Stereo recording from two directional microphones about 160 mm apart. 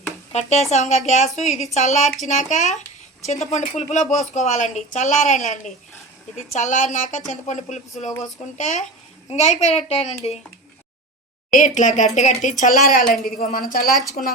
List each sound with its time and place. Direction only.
0.7 s speech: 45° left (ahead or behind)
11.5 s speech: 55° left (ahead or behind)
13.2 s speech: 65° left (ahead or behind)
13.8 s speech: centre (ahead or behind)